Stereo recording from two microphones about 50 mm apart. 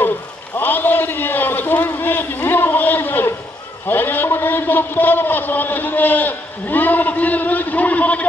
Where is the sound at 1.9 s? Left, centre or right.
Left.